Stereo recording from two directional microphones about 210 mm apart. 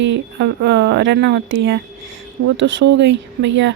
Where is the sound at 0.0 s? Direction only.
55° right (ahead or behind).